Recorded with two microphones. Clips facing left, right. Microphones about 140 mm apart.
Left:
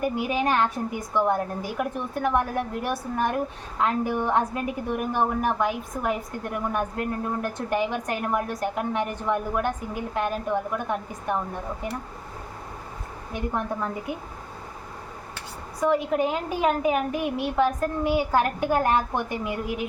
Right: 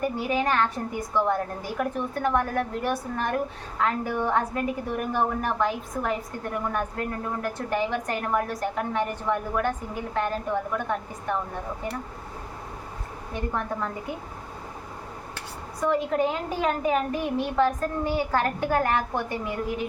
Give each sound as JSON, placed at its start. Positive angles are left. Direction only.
{"t": 0.0, "sound": "a woman's voice", "side_deg": 15}
{"t": 13.3, "sound": "a woman's voice", "side_deg": 15}
{"t": 15.8, "sound": "a woman's voice", "side_deg": 10}